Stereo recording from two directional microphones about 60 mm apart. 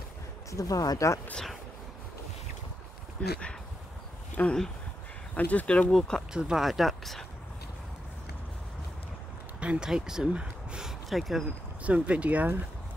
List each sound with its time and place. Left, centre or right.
0.5 s speech: left
3.2 s speech: centre
4.4 s speech: left
5.9 s speech: centre
6.3 s speech: centre
9.6 s a sound: centre
9.8 s speech: centre
11.1 s speech: centre
11.8 s speech: right